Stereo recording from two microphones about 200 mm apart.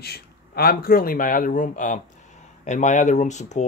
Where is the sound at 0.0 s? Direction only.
50° left (ahead or behind).